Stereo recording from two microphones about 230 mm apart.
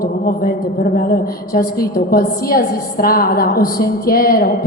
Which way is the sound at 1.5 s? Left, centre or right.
Left.